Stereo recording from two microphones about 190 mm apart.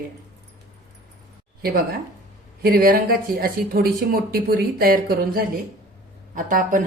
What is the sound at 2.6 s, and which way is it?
Speech, 50° right (ahead or behind).